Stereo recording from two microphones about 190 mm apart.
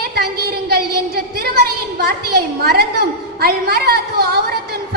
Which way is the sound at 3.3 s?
55° right (ahead or behind).